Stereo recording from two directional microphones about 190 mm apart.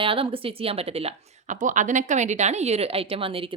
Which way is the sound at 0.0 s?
30° right (ahead or behind).